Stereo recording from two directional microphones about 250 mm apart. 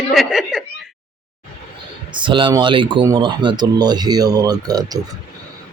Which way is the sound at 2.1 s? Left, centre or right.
Centre.